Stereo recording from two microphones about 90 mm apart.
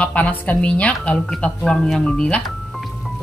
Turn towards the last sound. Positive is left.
turn(degrees=0)  # may be behind; listen again after turning